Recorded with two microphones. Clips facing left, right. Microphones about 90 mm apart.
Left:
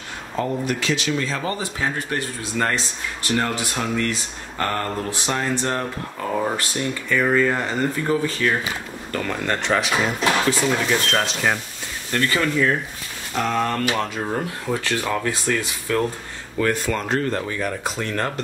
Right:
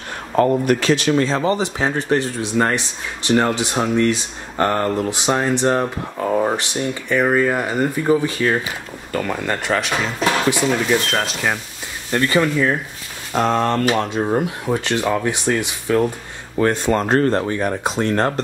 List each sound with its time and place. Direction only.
0.4 s speech: 50° right (ahead or behind)
1.2 s speech: 25° right (ahead or behind); by 11.6 s centre (ahead or behind)
12.1 s speech: 20° right (ahead or behind)
13.3 s speech: 35° right (ahead or behind)
13.9 s speech: 20° right (ahead or behind)
16.5 s speech: 30° right (ahead or behind)
17.3 s speech: 30° right (ahead or behind)